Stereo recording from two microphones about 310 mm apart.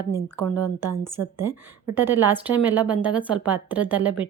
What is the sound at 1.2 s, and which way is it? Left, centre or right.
Speech, right.